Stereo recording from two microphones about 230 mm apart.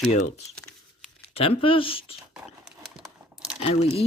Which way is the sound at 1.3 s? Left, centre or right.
Left.